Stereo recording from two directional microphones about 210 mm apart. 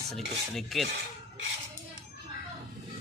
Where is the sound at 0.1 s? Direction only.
Centre (ahead or behind).